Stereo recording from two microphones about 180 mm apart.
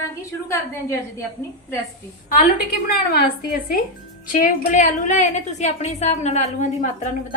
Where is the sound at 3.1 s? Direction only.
55° left (ahead or behind).